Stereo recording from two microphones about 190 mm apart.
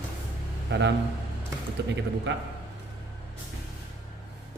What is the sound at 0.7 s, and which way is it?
Speech, 65° right (ahead or behind).